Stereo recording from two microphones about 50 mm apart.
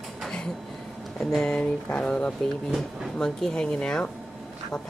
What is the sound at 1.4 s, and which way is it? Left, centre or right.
Speech, centre.